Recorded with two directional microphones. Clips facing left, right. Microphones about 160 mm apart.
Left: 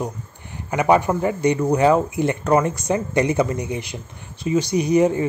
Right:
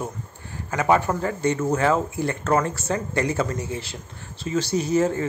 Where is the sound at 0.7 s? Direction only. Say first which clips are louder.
Left 3 dB; 15° left (ahead or behind).